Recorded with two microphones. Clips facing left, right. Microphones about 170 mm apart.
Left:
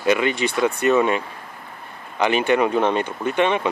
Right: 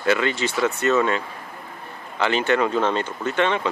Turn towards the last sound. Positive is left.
turn(degrees=15)  # may be behind; listen again after turning